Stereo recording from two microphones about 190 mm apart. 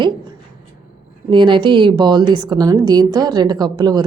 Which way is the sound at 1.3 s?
25° right (ahead or behind).